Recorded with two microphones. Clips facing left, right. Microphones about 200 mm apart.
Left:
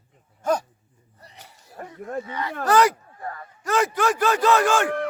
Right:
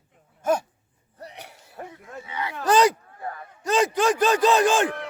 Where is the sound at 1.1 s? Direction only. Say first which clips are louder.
Right 8 dB; 70° right (ahead or behind).